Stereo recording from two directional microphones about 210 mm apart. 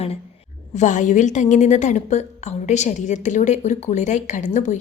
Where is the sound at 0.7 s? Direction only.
35° left (ahead or behind).